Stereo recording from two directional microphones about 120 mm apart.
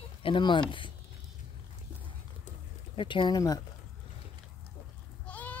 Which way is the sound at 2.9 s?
40° left (ahead or behind).